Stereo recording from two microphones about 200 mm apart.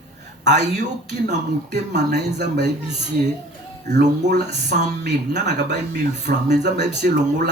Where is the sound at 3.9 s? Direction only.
55° right (ahead or behind).